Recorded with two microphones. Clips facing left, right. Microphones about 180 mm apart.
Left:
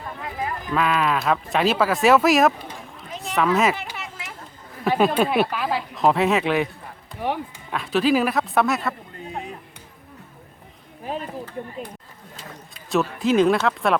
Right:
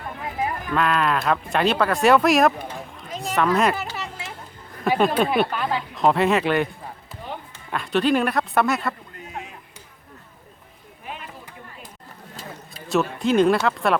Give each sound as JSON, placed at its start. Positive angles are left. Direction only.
{"t": 0.7, "sound": "speech", "side_deg": 0}
{"t": 3.9, "sound": "a sound", "side_deg": -35}
{"t": 4.9, "sound": "speech", "side_deg": 5}
{"t": 7.2, "sound": "a sound", "side_deg": 80}
{"t": 7.7, "sound": "speech", "side_deg": 0}
{"t": 11.0, "sound": "chop", "side_deg": 35}
{"t": 12.9, "sound": "speech", "side_deg": 0}